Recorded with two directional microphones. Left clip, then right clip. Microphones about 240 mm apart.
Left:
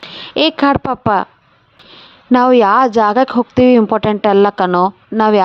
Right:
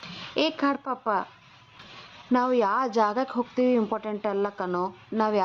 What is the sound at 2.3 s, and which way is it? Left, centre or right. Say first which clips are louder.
Speech: left 14 dB; left.